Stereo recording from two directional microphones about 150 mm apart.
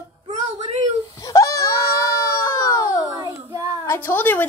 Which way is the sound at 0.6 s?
45° right (ahead or behind).